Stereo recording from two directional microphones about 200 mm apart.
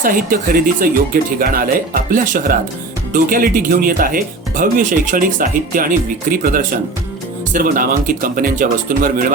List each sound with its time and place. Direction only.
0.0 s speech: 45° right (ahead or behind)